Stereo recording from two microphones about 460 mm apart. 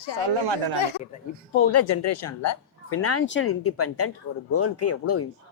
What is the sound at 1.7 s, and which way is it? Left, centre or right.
Speech, left.